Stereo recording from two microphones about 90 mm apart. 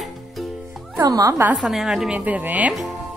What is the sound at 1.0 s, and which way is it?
Speech, 40° right (ahead or behind).